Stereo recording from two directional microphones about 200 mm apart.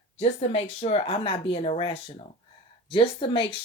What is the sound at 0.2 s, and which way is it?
A woman's voice, 30° left (ahead or behind).